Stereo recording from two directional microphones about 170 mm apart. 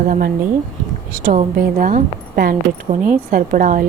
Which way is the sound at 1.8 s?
55° right (ahead or behind).